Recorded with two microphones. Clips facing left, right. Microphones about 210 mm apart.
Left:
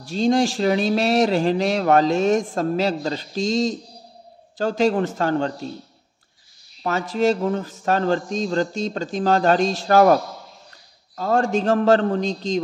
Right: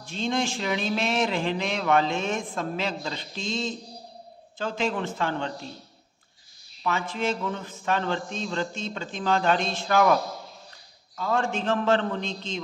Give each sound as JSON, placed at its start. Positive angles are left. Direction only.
{"t": 0.0, "sound": "speech", "side_deg": 40}
{"t": 6.8, "sound": "speech", "side_deg": 40}